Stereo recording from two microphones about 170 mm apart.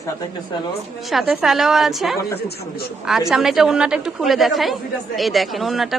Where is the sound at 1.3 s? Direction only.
Centre (ahead or behind).